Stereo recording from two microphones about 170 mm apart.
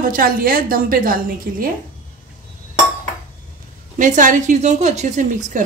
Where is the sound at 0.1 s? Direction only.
60° right (ahead or behind).